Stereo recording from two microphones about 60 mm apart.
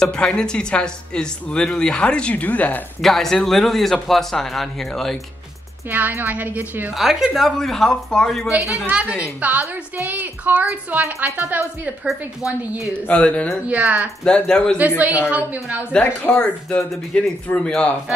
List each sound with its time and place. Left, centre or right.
0.0 s speech: centre
3.0 s speech: centre
5.9 s a woman's voice: right
7.0 s speech: centre
8.5 s a woman's voice: centre
8.8 s a woman's voice: right
13.0 s speech: left
13.7 s a woman's voice: right
14.2 s speech: centre
15.0 s a woman's voice: right
16.3 s speech: centre